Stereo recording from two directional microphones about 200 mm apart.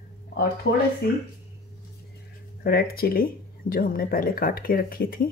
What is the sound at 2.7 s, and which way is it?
Speech, 50° left (ahead or behind).